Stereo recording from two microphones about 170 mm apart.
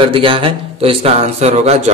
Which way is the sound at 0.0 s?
30° right (ahead or behind).